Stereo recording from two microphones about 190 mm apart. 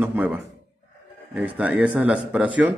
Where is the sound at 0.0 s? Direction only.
10° right (ahead or behind).